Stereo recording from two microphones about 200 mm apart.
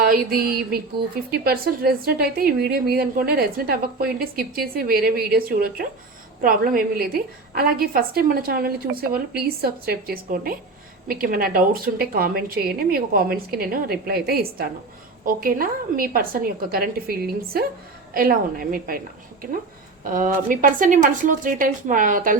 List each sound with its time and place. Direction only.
0.0 s a woman's voice: 50° right (ahead or behind)